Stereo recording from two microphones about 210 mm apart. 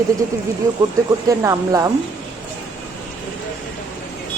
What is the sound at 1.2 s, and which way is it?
Speech, 15° right (ahead or behind).